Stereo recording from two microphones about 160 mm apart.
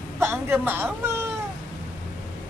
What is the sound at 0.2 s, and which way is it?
Speech, 15° right (ahead or behind).